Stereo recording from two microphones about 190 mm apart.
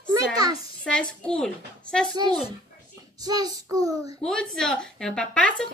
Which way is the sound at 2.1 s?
20° right (ahead or behind).